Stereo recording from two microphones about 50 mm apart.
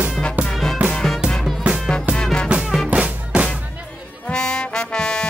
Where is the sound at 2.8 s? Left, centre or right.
Right.